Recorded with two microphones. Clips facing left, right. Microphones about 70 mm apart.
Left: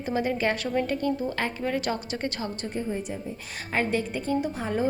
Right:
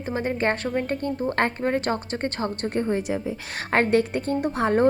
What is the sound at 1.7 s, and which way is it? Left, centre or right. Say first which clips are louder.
Speech: right 4 dB; right.